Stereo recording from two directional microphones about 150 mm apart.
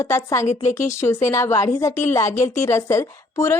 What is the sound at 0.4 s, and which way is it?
Speech, 55° left (ahead or behind).